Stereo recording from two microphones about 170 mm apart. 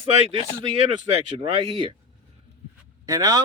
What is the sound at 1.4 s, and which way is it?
Speech, 30° right (ahead or behind).